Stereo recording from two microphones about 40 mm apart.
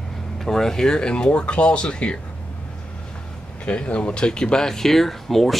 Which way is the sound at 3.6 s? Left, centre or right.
Left.